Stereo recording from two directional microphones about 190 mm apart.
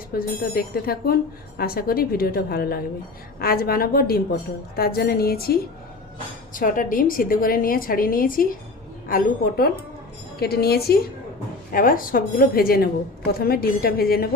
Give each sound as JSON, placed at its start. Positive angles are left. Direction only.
{"t": 0.1, "sound": "a woman's voice", "side_deg": 55}